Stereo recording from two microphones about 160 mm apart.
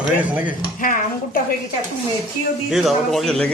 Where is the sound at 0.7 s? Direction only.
60° left (ahead or behind).